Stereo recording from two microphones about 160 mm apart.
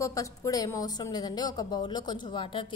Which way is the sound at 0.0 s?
20° left (ahead or behind).